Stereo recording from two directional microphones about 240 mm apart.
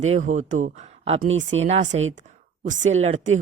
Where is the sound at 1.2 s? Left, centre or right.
Right.